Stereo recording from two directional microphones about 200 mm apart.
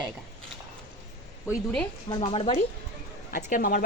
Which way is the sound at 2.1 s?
25° left (ahead or behind).